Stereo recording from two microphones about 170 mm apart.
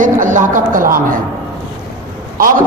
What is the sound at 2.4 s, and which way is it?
Speech, 55° right (ahead or behind).